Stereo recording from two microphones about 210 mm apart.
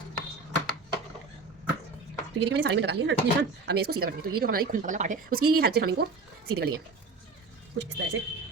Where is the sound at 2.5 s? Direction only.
55° right (ahead or behind).